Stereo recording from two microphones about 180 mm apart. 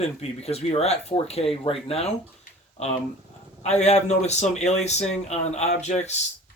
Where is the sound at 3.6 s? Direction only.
35° left (ahead or behind).